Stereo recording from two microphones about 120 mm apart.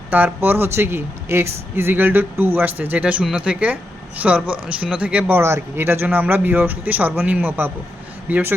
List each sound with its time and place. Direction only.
0.1 s speech: 15° right (ahead or behind)